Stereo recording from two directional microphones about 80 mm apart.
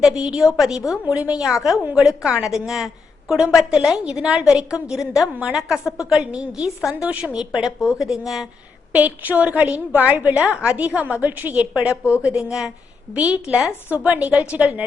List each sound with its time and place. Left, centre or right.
0.2 s a woman's voice: centre
1.0 s a woman's voice: centre
5.3 s a woman's voice: centre
8.9 s a woman's voice: centre